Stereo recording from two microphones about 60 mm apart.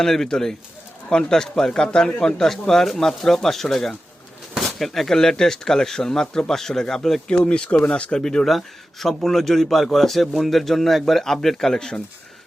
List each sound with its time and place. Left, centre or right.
0.0 s a man's voice: centre
7.3 s a man's voice: centre